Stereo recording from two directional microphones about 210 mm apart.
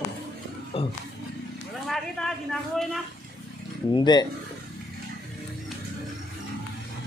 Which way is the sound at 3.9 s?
20° left (ahead or behind).